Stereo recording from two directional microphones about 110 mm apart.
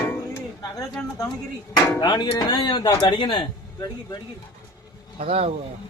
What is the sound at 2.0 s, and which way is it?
A man's voice, 40° left (ahead or behind).